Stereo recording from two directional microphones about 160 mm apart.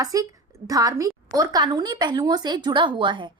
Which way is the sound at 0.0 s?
20° right (ahead or behind).